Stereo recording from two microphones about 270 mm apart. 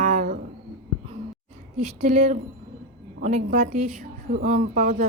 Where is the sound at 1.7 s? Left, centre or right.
Right.